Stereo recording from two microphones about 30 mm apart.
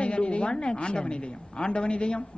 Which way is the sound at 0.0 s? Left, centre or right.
Left.